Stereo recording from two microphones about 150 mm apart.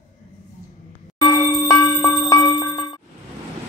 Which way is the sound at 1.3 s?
30° left (ahead or behind).